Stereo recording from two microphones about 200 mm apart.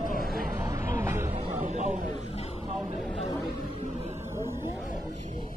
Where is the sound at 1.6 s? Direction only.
35° right (ahead or behind).